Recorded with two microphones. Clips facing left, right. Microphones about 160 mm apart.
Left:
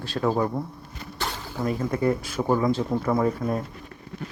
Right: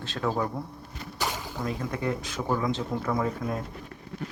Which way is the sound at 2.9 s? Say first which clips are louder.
Left 5 dB; 30° left (ahead or behind).